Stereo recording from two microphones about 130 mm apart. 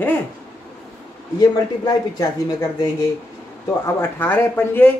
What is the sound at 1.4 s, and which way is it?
Speech, 30° left (ahead or behind).